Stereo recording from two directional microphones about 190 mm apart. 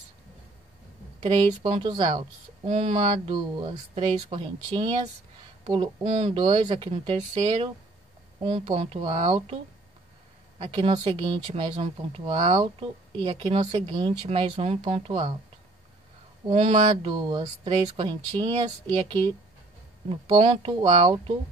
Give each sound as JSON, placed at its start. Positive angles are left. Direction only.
{"t": 1.2, "sound": "speech", "side_deg": -35}
{"t": 10.6, "sound": "speech", "side_deg": -25}
{"t": 16.4, "sound": "speech", "side_deg": -30}
{"t": 17.1, "sound": "speech", "side_deg": -25}
{"t": 20.1, "sound": "speech", "side_deg": -30}